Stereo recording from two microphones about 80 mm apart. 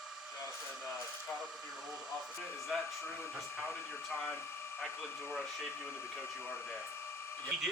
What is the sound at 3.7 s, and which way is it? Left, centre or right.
Speech, left.